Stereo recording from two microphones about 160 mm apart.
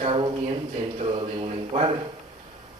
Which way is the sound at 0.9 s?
35° right (ahead or behind).